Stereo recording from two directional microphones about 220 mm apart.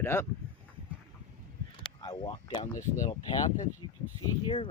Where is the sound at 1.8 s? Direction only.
25° left (ahead or behind).